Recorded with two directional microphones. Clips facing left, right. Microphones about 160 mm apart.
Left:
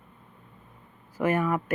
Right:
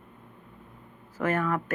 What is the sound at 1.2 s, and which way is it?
Speech, 10° left (ahead or behind).